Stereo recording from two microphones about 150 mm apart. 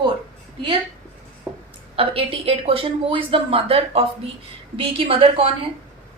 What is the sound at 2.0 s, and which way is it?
A woman's voice, 40° right (ahead or behind).